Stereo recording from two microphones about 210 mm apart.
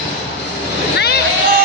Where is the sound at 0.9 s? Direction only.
50° left (ahead or behind).